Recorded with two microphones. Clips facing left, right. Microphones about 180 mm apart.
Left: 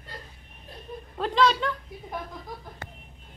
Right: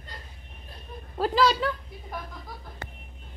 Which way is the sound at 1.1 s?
5° right (ahead or behind).